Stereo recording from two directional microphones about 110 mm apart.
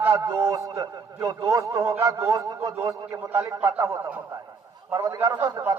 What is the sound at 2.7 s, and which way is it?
Speech, 20° right (ahead or behind).